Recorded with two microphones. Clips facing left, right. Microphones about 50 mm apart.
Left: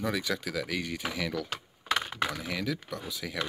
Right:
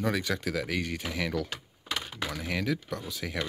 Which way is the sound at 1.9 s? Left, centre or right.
Left.